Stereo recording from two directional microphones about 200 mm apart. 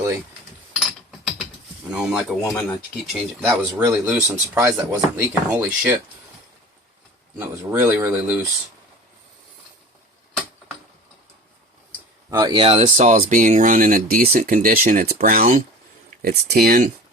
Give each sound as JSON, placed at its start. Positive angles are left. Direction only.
{"t": 0.8, "sound": "a sound", "side_deg": 5}
{"t": 1.9, "sound": "speech", "side_deg": -5}
{"t": 3.4, "sound": "speech", "side_deg": -10}
{"t": 7.3, "sound": "speech", "side_deg": -10}
{"t": 12.3, "sound": "speech", "side_deg": -20}
{"t": 13.1, "sound": "speech", "side_deg": -45}